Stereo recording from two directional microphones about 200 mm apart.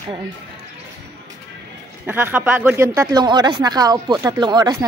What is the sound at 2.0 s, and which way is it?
Speech, 10° right (ahead or behind).